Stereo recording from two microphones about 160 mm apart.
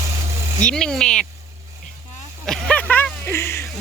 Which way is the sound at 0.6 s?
5° left (ahead or behind).